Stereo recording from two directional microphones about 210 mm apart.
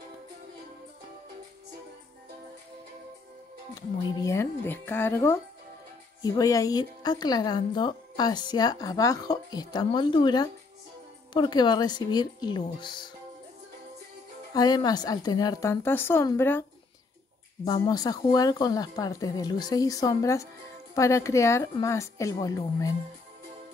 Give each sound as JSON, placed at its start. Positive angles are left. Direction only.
{"t": 3.7, "sound": "a woman's voice", "side_deg": 15}
{"t": 14.5, "sound": "speech", "side_deg": 20}
{"t": 17.6, "sound": "speech", "side_deg": 20}